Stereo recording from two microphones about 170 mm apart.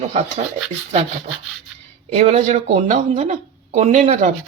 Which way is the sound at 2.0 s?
45° right (ahead or behind).